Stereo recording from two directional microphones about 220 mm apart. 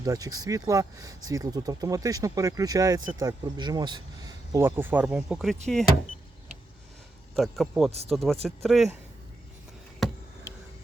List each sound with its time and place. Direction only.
0.0 s speech: 15° right (ahead or behind)
7.3 s speech: centre (ahead or behind)
7.9 s speech: 30° right (ahead or behind)
8.1 s speech: centre (ahead or behind)